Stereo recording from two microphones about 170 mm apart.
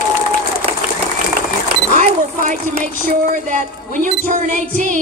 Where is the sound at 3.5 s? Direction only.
45° right (ahead or behind).